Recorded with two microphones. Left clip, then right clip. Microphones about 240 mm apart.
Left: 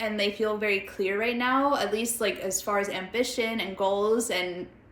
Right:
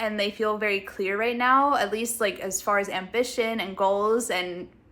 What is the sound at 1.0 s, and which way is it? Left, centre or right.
Speech, centre.